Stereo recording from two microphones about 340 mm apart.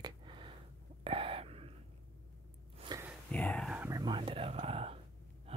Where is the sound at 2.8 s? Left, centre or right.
Centre.